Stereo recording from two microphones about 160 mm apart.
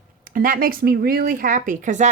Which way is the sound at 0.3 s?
60° right (ahead or behind).